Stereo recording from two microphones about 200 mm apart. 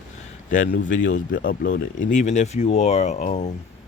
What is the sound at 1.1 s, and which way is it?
Speech, 65° left (ahead or behind).